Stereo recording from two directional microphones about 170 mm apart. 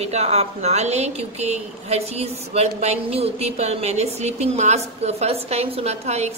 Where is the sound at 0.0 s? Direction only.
40° right (ahead or behind).